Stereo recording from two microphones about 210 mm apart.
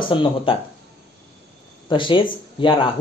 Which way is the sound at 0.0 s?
25° left (ahead or behind).